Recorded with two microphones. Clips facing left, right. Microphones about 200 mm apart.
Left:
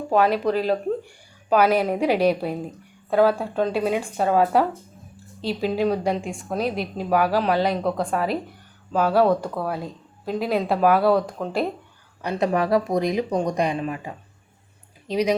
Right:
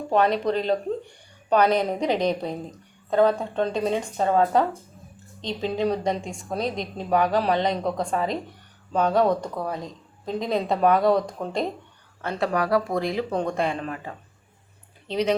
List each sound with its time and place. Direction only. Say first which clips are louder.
0.1 s speech: left 2 dB; 5° left (ahead or behind)
12.2 s speech: left 3 dB; 15° left (ahead or behind)